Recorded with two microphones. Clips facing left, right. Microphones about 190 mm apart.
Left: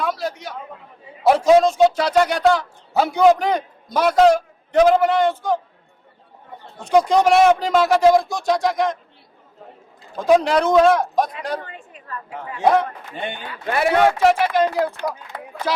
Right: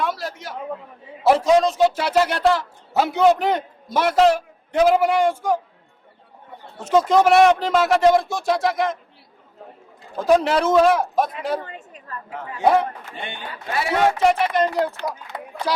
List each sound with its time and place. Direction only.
0.0 s a sound: centre (ahead or behind)
1.2 s speech: centre (ahead or behind)
6.7 s speech: 5° right (ahead or behind)
10.2 s speech: centre (ahead or behind)
11.6 s a woman's voice: 40° right (ahead or behind)
13.7 s a man's voice: 60° left (ahead or behind)
14.2 s speech: centre (ahead or behind)